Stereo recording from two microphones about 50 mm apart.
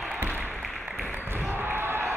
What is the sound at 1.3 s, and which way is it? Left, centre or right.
Basketball bounce, right.